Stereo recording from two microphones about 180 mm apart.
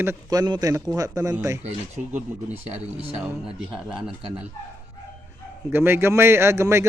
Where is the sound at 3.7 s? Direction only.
25° right (ahead or behind).